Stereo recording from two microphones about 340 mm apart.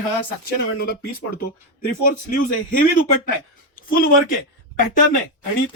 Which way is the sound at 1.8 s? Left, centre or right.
Left.